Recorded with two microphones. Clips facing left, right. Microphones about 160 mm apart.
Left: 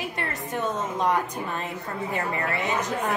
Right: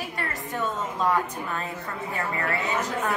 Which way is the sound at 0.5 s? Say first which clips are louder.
Left 2 dB; 20° left (ahead or behind).